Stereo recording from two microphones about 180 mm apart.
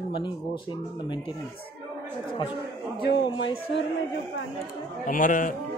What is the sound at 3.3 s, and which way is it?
Speech, 90° left.